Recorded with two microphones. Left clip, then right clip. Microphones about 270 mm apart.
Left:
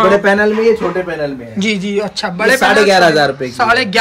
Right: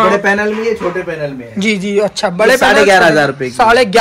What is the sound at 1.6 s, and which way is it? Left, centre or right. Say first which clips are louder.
A man's voice: right 4 dB; centre.